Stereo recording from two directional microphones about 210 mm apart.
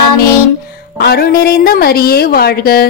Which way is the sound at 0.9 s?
50° left (ahead or behind).